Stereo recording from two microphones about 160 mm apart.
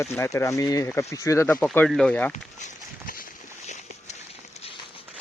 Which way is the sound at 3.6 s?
45° left (ahead or behind).